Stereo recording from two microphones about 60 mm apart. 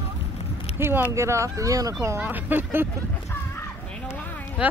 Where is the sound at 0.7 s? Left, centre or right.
Right.